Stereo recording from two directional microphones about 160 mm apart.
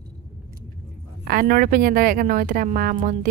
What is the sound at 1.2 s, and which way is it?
Speech, 65° right (ahead or behind).